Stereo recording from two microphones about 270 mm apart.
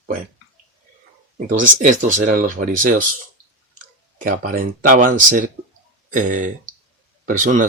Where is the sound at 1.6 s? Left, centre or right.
Right.